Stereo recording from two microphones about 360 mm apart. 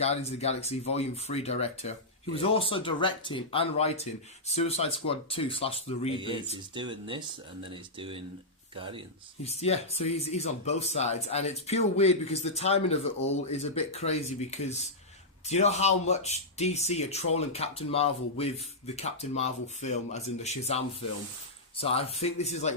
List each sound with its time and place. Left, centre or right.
0.0 s speech: centre
6.1 s speech: centre
9.4 s speech: centre